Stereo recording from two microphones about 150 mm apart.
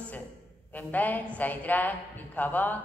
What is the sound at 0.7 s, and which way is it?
A man's voice, 10° left (ahead or behind).